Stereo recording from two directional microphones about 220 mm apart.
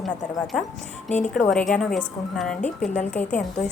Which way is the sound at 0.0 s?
Centre (ahead or behind).